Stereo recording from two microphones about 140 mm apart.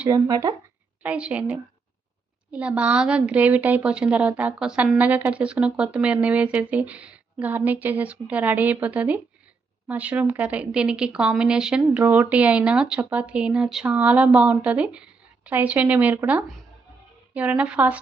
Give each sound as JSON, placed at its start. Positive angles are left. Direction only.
{"t": 0.1, "sound": "speech", "side_deg": -25}
{"t": 1.0, "sound": "speech", "side_deg": -10}